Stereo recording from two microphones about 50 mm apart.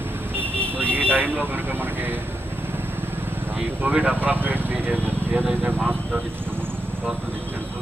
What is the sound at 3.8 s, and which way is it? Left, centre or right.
Speech, right.